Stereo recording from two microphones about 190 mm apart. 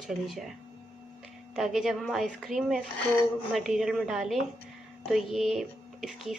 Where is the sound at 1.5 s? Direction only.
Centre (ahead or behind).